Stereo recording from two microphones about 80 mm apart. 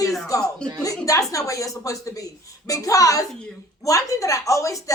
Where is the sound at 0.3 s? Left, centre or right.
Left.